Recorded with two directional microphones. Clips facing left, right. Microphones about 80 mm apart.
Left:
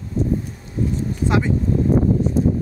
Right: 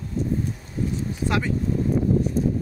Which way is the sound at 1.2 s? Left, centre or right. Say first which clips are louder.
Left 5 dB; left.